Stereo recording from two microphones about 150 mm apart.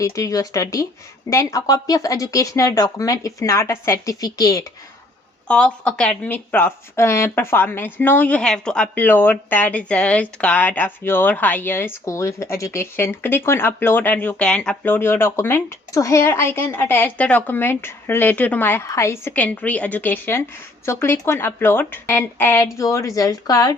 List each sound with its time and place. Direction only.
0.0 s speech: 20° left (ahead or behind)
5.5 s speech: 5° left (ahead or behind); by 23.7 s 25° left (ahead or behind)